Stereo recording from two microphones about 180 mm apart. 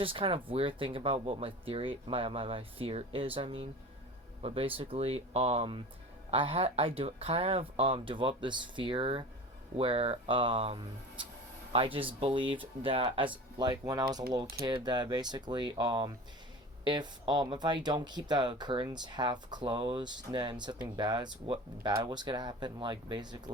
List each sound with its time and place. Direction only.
0.0 s speech: 30° right (ahead or behind)